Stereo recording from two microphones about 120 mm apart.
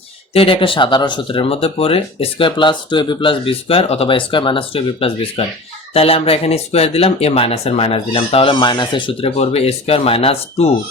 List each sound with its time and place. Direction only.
0.3 s speech: 50° left (ahead or behind)